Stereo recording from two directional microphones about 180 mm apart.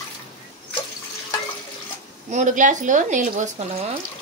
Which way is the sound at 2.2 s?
40° right (ahead or behind).